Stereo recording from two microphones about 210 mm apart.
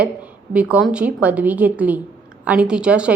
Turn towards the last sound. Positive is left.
turn(degrees=-5)  # may be behind; listen again after turning